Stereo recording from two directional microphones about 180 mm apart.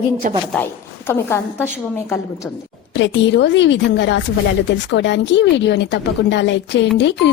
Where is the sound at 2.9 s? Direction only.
90° left.